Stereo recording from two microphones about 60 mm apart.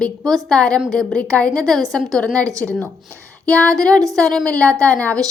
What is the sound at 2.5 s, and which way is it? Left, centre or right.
Speech, right.